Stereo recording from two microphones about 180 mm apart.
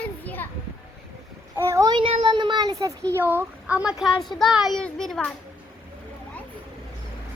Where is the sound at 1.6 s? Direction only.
15° right (ahead or behind).